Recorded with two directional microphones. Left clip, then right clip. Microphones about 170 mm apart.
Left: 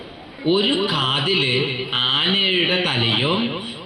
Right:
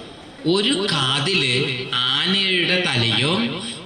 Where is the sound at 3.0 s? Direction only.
90° right.